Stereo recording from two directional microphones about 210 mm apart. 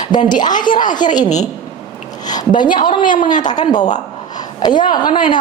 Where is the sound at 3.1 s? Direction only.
40° left (ahead or behind).